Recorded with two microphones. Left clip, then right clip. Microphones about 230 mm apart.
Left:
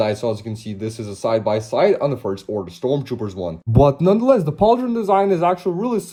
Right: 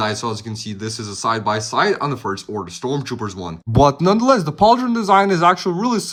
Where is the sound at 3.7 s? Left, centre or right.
Centre.